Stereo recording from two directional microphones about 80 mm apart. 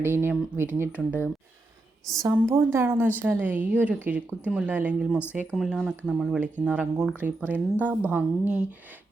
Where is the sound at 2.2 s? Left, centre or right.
Right; by 5.1 s centre.